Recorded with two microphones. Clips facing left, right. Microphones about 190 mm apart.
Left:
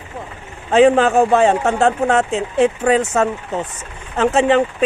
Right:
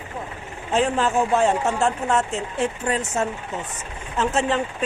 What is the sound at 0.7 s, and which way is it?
Speech, 75° left (ahead or behind).